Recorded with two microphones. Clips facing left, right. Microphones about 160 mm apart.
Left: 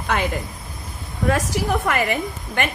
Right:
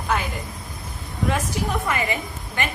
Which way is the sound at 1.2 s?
75° left (ahead or behind).